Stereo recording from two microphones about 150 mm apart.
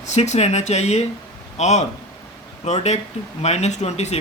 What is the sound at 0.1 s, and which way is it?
Speech, 50° left (ahead or behind).